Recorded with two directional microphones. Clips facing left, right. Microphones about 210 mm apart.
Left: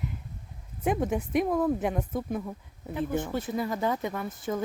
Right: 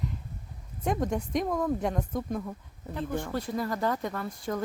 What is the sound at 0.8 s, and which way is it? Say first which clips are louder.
Speech: left 2 dB; 5° left (ahead or behind).